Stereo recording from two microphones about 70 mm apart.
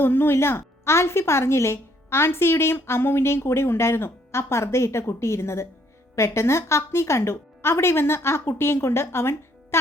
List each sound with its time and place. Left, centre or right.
0.0 s a woman's voice: left